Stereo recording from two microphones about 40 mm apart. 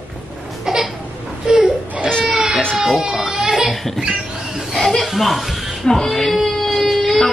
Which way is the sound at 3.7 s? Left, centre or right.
Centre.